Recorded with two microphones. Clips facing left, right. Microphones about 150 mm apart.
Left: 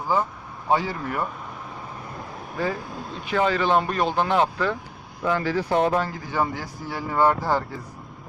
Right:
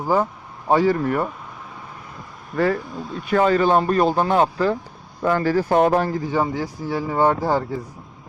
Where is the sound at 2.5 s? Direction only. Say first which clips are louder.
Right 7 dB; 65° right (ahead or behind).